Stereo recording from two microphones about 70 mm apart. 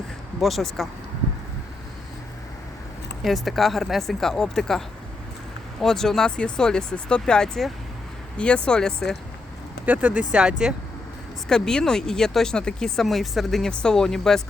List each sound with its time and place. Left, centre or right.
0.3 s speech: centre
3.2 s speech: centre
5.8 s speech: centre
9.8 s speech: right
11.4 s speech: centre